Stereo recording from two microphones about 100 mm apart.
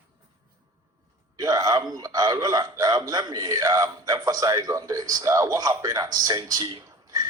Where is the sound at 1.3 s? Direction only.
35° right (ahead or behind).